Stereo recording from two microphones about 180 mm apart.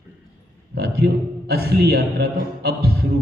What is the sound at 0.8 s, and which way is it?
A man's voice, 60° right (ahead or behind).